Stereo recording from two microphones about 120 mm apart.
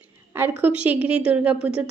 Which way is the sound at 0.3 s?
15° right (ahead or behind).